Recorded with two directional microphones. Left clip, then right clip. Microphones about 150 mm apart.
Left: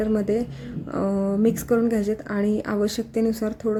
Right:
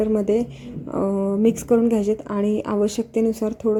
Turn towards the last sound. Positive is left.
turn(degrees=-10)  # may be behind; listen again after turning